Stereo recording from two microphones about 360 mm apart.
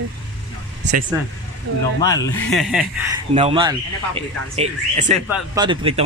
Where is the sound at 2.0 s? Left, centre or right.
Centre.